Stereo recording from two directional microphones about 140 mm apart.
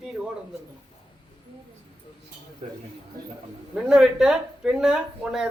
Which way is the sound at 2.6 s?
50° right (ahead or behind).